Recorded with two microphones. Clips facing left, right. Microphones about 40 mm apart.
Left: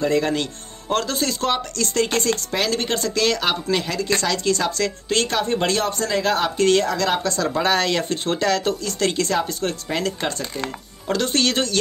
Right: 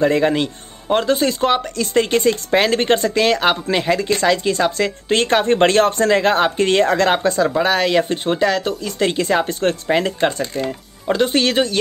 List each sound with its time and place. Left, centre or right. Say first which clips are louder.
0.0 s a man's voice: right 5 dB; right
2.5 s speech: right 7 dB; right
7.2 s a man's voice: right 4 dB; centre
9.4 s speech: right 5 dB; right; by 11.8 s centre